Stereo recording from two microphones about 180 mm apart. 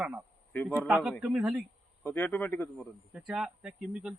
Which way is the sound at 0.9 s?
5° right (ahead or behind).